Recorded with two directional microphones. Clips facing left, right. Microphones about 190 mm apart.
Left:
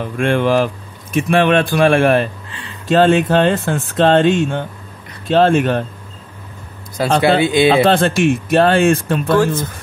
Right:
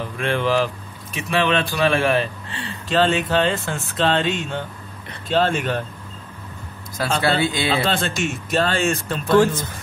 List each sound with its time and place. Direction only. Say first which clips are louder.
0.0 s speech: left 6 dB; 50° left (ahead or behind)
7.2 s speech: left 8 dB; 20° left (ahead or behind)
7.8 s speech: left 10 dB; 55° left (ahead or behind)